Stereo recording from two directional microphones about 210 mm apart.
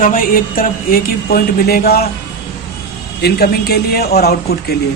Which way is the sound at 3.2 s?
50° left (ahead or behind).